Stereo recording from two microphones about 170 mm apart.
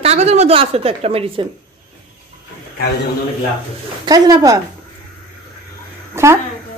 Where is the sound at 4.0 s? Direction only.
25° right (ahead or behind).